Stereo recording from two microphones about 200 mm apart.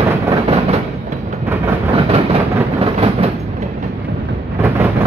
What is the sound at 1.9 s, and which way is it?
Vehicle, 30° right (ahead or behind).